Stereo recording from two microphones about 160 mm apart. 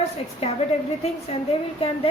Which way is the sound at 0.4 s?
40° left (ahead or behind).